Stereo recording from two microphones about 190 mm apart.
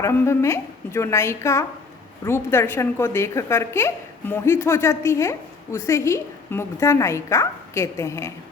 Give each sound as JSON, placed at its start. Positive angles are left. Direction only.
{"t": 0.0, "sound": "a woman's voice", "side_deg": 15}